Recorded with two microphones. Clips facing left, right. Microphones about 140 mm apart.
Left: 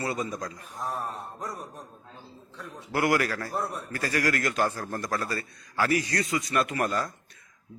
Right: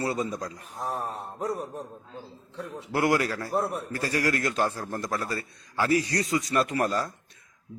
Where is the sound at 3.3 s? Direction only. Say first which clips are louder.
Right 4 dB; 10° right (ahead or behind).